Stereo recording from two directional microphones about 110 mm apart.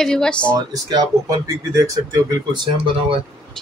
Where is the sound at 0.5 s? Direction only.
35° right (ahead or behind).